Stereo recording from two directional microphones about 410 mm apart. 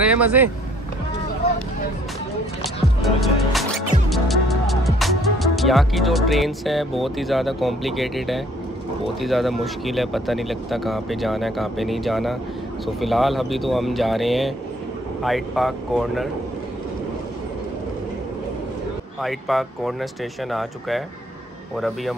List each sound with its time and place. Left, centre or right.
0.0 s speech: centre
2.6 s music: centre
9.2 s speech: centre
19.2 s speech: centre
21.7 s speech: centre